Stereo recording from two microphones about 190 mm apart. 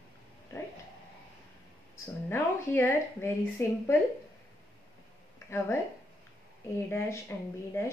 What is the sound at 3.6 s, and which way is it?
Speech, 15° left (ahead or behind).